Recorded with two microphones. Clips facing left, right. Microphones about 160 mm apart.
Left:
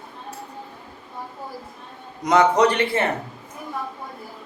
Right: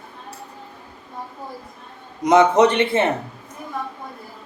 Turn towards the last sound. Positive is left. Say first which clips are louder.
# right 3 dB
turn(degrees=-25)  # may be behind; listen again after turning